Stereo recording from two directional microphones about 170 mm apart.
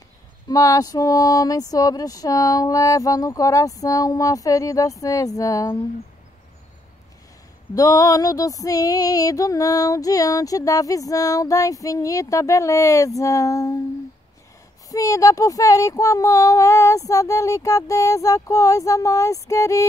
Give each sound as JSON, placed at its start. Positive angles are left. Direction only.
{"t": 0.5, "sound": "female singing", "side_deg": 20}
{"t": 7.7, "sound": "female singing", "side_deg": 20}
{"t": 14.9, "sound": "female singing", "side_deg": 20}